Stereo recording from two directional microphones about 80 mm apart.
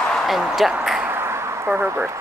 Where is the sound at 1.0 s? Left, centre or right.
Right.